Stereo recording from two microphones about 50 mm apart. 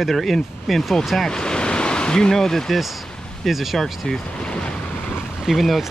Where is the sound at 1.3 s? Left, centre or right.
Centre.